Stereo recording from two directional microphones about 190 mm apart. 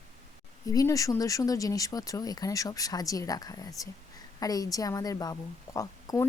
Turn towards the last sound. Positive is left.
turn(degrees=15)  # may be behind; listen again after turning